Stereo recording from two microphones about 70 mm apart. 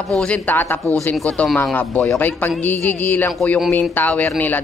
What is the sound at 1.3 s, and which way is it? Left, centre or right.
Speech, centre.